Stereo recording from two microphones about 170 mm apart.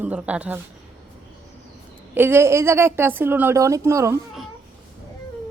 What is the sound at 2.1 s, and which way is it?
A woman's voice, 15° right (ahead or behind).